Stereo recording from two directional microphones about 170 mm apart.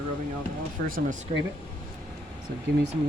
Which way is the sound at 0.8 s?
55° right (ahead or behind).